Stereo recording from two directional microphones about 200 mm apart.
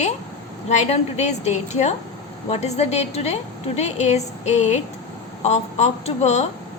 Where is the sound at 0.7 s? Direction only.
35° left (ahead or behind).